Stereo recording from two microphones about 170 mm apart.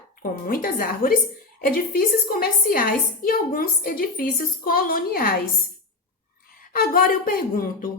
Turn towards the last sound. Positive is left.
turn(degrees=55)  # may be behind; listen again after turning